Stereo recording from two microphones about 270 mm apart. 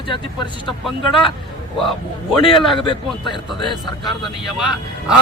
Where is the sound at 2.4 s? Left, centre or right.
Centre.